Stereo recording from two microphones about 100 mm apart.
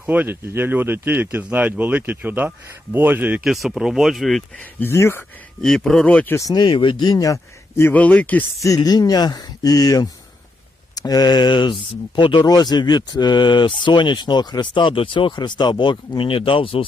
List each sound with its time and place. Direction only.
0.1 s speech: 20° right (ahead or behind)
3.4 s speech: centre (ahead or behind)
4.8 s speech: 25° left (ahead or behind)
5.6 s speech: 5° left (ahead or behind)
6.5 s speech: 50° left (ahead or behind)
7.8 s speech: 20° left (ahead or behind)
8.6 s speech: 40° left (ahead or behind); by 16.8 s 65° left (ahead or behind)